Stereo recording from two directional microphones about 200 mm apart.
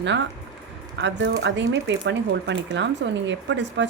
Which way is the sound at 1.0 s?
60° right (ahead or behind).